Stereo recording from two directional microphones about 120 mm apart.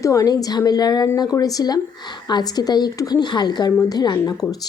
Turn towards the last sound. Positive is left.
turn(degrees=30)  # may be behind; listen again after turning